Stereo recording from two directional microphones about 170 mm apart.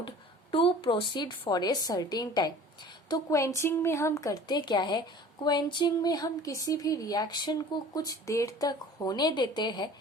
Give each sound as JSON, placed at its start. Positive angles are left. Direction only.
{"t": 0.5, "sound": "a woman's voice", "side_deg": 30}